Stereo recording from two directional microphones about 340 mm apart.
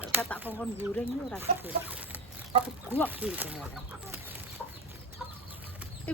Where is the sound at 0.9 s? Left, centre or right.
Centre.